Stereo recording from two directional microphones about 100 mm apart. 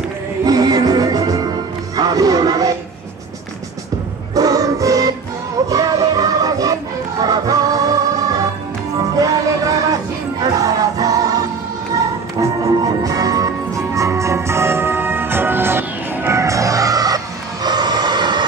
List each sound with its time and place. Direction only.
0.5 s music: 40° right (ahead or behind)
4.4 s music: 35° right (ahead or behind)
9.1 s music: 40° right (ahead or behind)